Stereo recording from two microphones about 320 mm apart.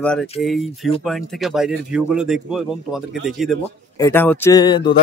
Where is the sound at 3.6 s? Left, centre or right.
Centre.